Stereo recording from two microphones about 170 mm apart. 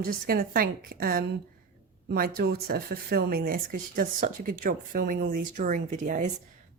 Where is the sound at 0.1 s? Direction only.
60° right (ahead or behind).